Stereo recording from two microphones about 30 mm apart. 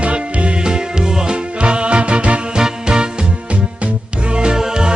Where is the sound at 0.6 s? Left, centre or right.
Right.